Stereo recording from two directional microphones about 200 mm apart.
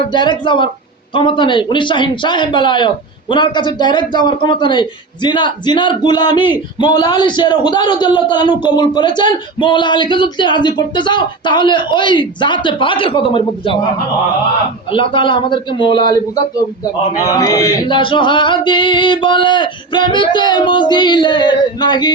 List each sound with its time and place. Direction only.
0.1 s a man's voice: 20° left (ahead or behind)
14.8 s a man's voice: 25° left (ahead or behind)
17.2 s a man's voice: 15° left (ahead or behind)